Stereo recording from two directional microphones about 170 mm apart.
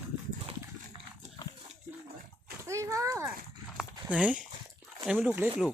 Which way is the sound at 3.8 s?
5° right (ahead or behind).